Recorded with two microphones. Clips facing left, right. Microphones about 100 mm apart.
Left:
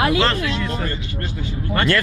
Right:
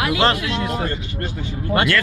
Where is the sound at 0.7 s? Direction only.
40° right (ahead or behind).